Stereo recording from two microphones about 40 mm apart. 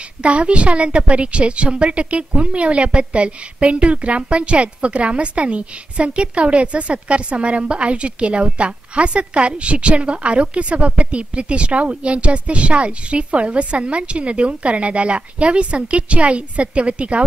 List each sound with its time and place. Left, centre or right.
0.2 s a woman's voice: right